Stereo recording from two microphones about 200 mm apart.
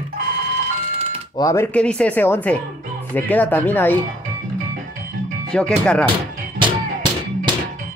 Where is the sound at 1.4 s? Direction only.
15° left (ahead or behind).